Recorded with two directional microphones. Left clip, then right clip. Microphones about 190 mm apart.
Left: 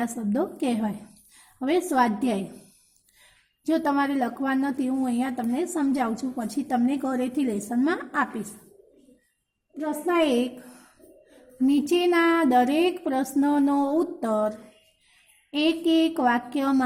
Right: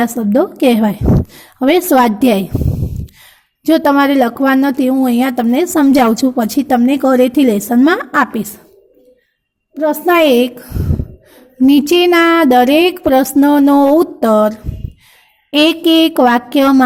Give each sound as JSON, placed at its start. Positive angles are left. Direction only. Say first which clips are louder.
{"t": 0.0, "sound": "speech", "louder": "right 14 dB", "side_deg": -25}
{"t": 3.6, "sound": "speech", "louder": "right 14 dB", "side_deg": -30}
{"t": 9.8, "sound": "speech", "louder": "right 14 dB", "side_deg": -40}